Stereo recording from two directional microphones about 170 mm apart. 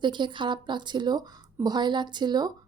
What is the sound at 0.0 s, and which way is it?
Speech, 25° right (ahead or behind).